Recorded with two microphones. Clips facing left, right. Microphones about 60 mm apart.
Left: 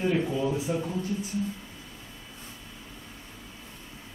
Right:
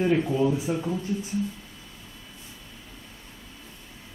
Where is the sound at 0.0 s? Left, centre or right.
Right.